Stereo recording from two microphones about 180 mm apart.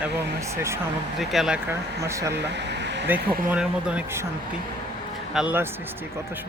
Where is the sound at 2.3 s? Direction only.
75° right (ahead or behind).